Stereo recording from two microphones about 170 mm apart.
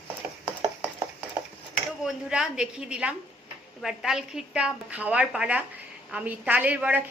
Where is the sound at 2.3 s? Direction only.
5° right (ahead or behind).